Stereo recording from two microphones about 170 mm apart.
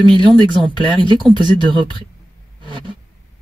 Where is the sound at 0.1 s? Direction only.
25° right (ahead or behind).